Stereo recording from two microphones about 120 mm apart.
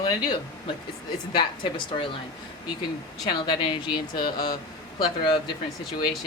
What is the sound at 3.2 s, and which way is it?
Speech, 45° left (ahead or behind).